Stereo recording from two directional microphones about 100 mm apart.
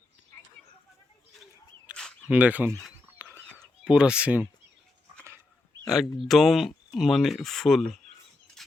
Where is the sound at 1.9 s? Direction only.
10° right (ahead or behind).